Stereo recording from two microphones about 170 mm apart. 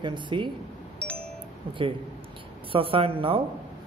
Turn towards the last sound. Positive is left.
turn(degrees=-30)  # may be behind; listen again after turning